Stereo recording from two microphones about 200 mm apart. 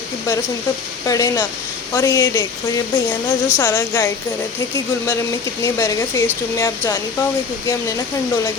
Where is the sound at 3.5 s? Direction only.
10° left (ahead or behind).